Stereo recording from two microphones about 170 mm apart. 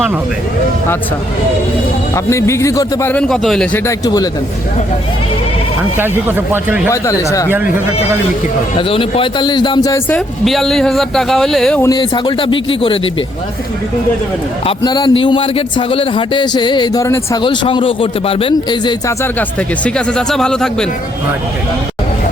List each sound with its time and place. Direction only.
2.1 s speech: 15° left (ahead or behind)
3.8 s speech: 20° left (ahead or behind)
6.0 s speech: 10° right (ahead or behind)
6.9 s speech: 15° left (ahead or behind)
8.8 s speech: 30° left (ahead or behind)
10.1 s speech: 5° left (ahead or behind)
11.8 s speech: 25° left (ahead or behind)
14.8 s speech: 25° left (ahead or behind)
19.2 s speech: 10° left (ahead or behind)